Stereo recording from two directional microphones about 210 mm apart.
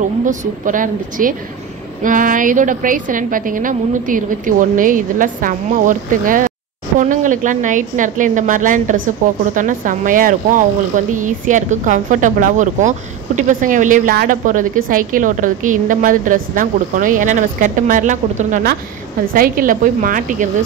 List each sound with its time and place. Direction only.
0.2 s a woman's voice: 35° right (ahead or behind)